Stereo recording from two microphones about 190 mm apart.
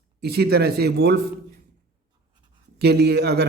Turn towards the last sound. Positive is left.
turn(degrees=-60)  # may be behind; listen again after turning